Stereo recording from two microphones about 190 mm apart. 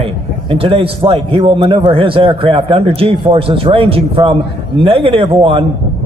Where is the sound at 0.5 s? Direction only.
30° right (ahead or behind).